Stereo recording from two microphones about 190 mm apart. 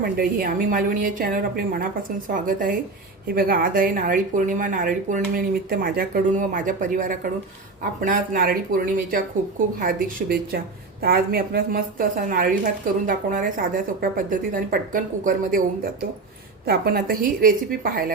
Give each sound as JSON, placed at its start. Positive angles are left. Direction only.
{"t": 0.0, "sound": "a woman's voice", "side_deg": -50}